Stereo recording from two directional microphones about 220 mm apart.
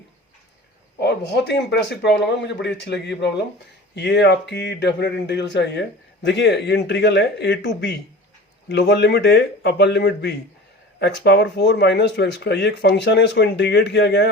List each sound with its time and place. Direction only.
0.9 s speech: 50° left (ahead or behind)